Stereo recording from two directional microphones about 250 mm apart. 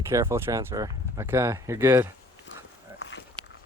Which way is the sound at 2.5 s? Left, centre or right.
Left.